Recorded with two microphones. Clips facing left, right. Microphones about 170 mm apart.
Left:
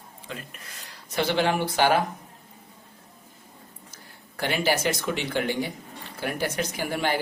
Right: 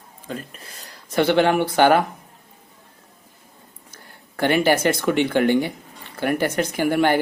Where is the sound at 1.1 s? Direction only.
60° right (ahead or behind).